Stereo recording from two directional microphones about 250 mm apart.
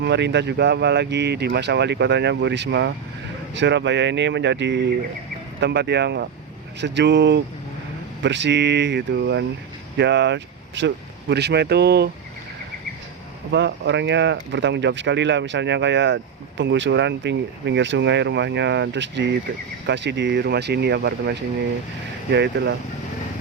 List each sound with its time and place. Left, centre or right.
0.0 s speech: right
13.5 s speech: right